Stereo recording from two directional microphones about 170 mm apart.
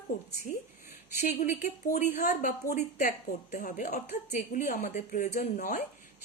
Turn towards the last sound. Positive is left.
turn(degrees=45)  # may be behind; listen again after turning